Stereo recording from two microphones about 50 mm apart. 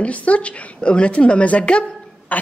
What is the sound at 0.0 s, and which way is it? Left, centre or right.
A woman's voice, left.